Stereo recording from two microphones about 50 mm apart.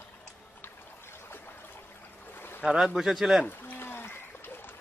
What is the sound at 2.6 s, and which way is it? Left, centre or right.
Speech, centre.